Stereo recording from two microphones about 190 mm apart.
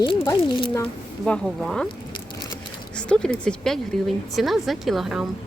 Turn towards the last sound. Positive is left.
turn(degrees=0)  # may be behind; listen again after turning